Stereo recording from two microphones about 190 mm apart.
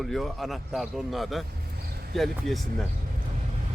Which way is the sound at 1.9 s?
55° right (ahead or behind).